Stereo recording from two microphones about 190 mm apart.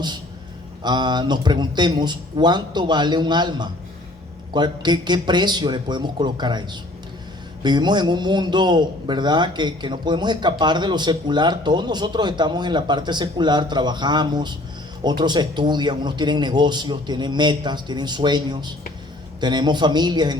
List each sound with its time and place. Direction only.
0.8 s a man's voice: 25° right (ahead or behind)